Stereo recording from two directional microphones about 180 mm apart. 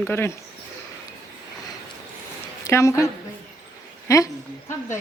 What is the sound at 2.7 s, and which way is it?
Speech, 15° left (ahead or behind).